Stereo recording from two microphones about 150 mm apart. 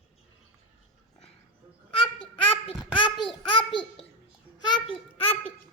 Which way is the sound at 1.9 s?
35° left (ahead or behind).